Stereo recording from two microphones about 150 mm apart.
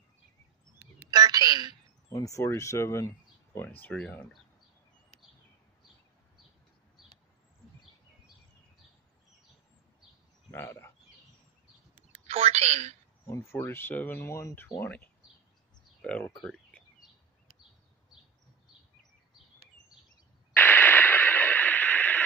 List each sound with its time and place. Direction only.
1.1 s telephone: 25° right (ahead or behind)
2.0 s speech: 20° left (ahead or behind)
10.5 s speech: 15° left (ahead or behind)
12.1 s bird: 40° right (ahead or behind)
13.3 s speech: 20° left (ahead or behind)
16.0 s a sound: 5° left (ahead or behind)
20.5 s radio: 15° left (ahead or behind)